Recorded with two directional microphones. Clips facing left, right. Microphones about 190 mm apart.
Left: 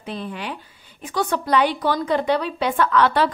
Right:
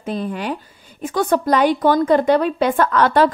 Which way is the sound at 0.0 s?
45° right (ahead or behind).